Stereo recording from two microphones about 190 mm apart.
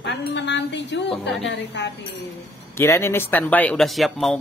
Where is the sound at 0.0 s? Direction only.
65° left (ahead or behind).